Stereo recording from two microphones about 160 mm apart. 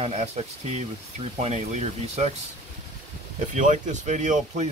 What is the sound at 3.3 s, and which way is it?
Speech, 50° right (ahead or behind).